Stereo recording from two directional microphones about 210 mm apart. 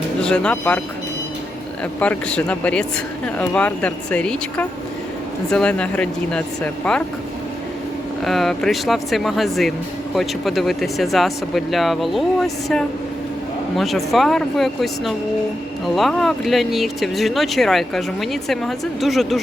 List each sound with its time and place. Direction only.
0.2 s speech: 5° left (ahead or behind)
1.8 s speech: 5° left (ahead or behind)
8.2 s speech: centre (ahead or behind)